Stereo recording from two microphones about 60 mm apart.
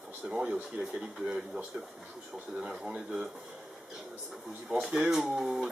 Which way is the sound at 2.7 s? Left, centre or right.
Centre.